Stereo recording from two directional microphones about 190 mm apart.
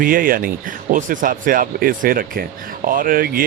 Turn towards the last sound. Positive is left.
turn(degrees=-50)  # may be behind; listen again after turning